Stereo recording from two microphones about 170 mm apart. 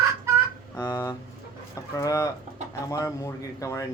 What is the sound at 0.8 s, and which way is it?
A child's voice, 20° left (ahead or behind).